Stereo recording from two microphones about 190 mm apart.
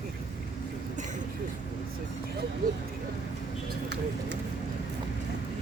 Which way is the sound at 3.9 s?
65° right (ahead or behind).